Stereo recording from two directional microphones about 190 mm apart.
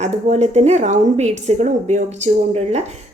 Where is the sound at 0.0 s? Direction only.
35° right (ahead or behind).